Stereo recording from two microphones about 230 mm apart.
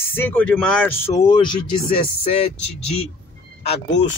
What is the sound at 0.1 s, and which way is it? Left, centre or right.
Speech, centre.